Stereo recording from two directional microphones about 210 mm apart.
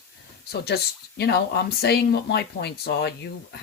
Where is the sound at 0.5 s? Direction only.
50° left (ahead or behind).